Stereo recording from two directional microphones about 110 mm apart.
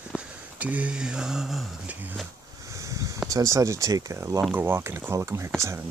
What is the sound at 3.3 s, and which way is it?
Speech, 30° right (ahead or behind).